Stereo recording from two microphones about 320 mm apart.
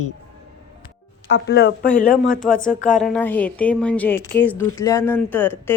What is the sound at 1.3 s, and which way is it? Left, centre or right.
Speech, left.